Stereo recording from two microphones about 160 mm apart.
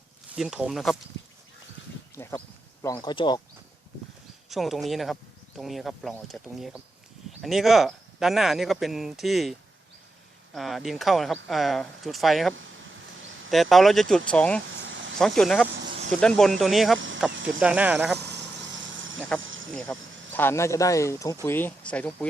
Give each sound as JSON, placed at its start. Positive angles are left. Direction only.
{"t": 0.3, "sound": "speech", "side_deg": -5}
{"t": 2.1, "sound": "speech", "side_deg": 15}
{"t": 4.4, "sound": "speech", "side_deg": 0}
{"t": 19.2, "sound": "speech", "side_deg": 5}